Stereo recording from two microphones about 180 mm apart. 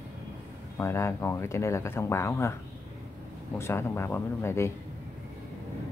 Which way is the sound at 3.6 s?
15° left (ahead or behind).